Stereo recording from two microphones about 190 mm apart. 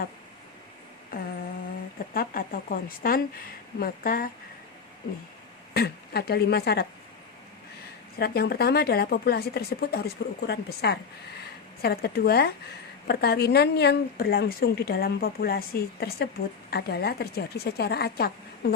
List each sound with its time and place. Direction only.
1.1 s speech: 50° left (ahead or behind)
5.7 s a woman's voice: 55° left (ahead or behind)
8.2 s a woman's voice: 55° left (ahead or behind)